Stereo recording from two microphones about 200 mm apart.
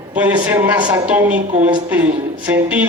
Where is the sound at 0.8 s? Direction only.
20° right (ahead or behind).